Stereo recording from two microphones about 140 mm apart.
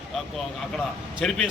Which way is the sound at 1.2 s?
5° left (ahead or behind).